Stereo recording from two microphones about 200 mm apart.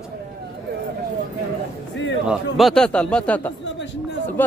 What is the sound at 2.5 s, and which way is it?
Speech, centre (ahead or behind).